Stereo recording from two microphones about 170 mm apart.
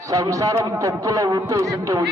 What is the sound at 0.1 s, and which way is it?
A man's voice, 20° right (ahead or behind).